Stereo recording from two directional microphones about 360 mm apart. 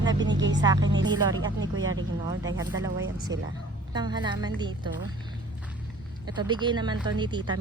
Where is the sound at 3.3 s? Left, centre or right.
Centre.